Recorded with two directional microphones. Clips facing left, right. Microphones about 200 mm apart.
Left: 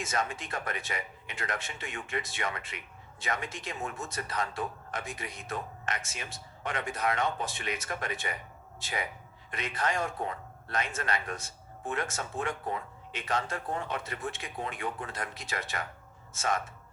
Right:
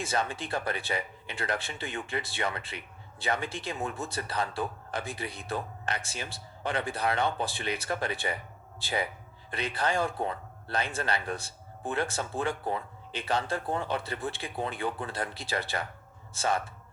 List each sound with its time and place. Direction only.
0.0 s speech: 30° right (ahead or behind)